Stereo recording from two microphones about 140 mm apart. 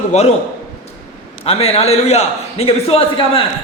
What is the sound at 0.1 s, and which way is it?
Speech, 55° left (ahead or behind).